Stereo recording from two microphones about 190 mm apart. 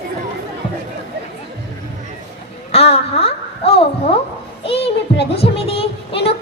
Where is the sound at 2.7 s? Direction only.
30° left (ahead or behind).